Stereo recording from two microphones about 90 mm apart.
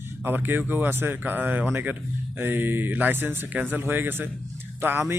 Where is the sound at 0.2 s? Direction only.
20° right (ahead or behind).